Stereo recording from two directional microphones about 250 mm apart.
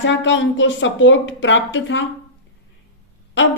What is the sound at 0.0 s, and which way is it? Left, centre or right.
A woman's voice, left.